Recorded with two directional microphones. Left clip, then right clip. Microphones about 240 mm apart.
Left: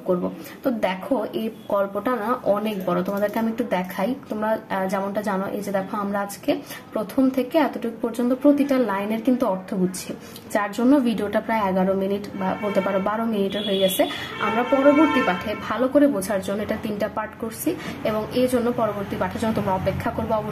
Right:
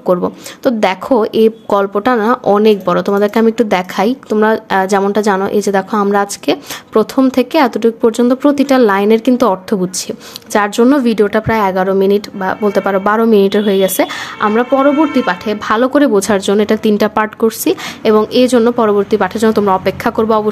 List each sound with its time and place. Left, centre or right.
0.7 s a woman's voice: right
15.2 s a woman's voice: right